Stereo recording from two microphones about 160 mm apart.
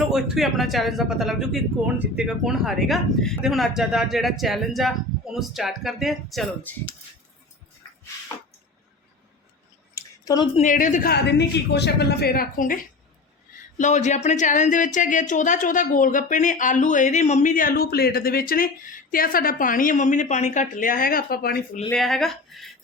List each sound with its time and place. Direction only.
0.1 s speech: centre (ahead or behind)
9.9 s a sound: 25° left (ahead or behind)
10.6 s speech: 50° left (ahead or behind)
11.1 s a woman's voice: 90° left; by 21.8 s 70° left (ahead or behind)
21.9 s speech: centre (ahead or behind)